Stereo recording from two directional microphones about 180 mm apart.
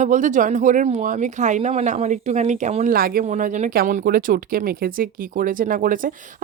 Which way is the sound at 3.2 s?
40° right (ahead or behind).